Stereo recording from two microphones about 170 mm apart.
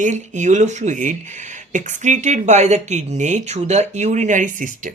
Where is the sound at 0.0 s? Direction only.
45° right (ahead or behind).